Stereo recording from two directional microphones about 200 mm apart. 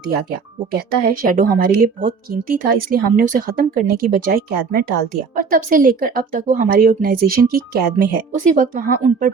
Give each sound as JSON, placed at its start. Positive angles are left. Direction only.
{"t": 0.3, "sound": "a woman's voice", "side_deg": -45}